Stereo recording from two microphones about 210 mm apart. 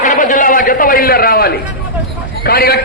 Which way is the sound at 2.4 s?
45° left (ahead or behind).